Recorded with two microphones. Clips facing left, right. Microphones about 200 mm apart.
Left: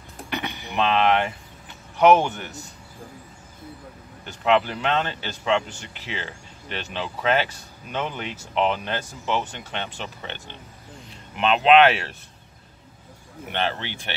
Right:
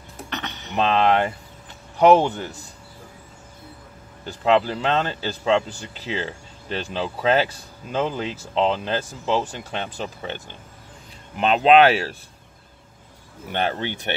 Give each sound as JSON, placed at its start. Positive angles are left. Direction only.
{"t": 0.3, "sound": "dishes", "side_deg": 10}
{"t": 0.7, "sound": "speech", "side_deg": -35}
{"t": 4.3, "sound": "speech", "side_deg": -35}
{"t": 13.5, "sound": "speech", "side_deg": -45}